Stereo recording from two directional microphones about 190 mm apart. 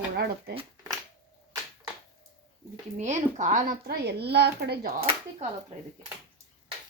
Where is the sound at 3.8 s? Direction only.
60° right (ahead or behind).